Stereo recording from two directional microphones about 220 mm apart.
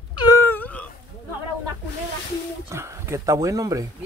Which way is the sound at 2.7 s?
10° right (ahead or behind).